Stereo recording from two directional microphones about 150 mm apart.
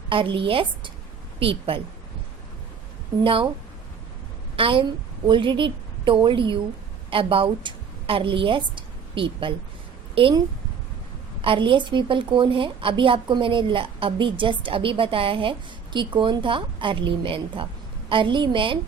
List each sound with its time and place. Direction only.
0.1 s a woman's voice: 35° right (ahead or behind)
4.5 s a woman's voice: 35° right (ahead or behind)
11.4 s a woman's voice: 35° right (ahead or behind)